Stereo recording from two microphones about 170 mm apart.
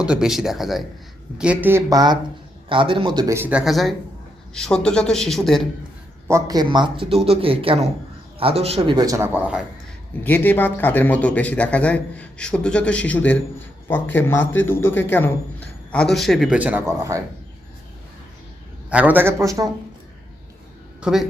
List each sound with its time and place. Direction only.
0.0 s a man's voice: 5° right (ahead or behind)
6.2 s speech: 20° right (ahead or behind); by 9.0 s 35° right (ahead or behind)
9.0 s a man's voice: 20° right (ahead or behind)
10.2 s a man's voice: 10° left (ahead or behind); by 17.2 s 15° right (ahead or behind)
18.9 s a man's voice: 10° right (ahead or behind)
21.0 s speech: centre (ahead or behind)